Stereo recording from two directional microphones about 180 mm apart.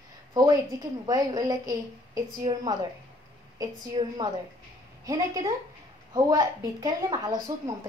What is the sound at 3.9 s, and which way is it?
A woman's voice, 25° right (ahead or behind).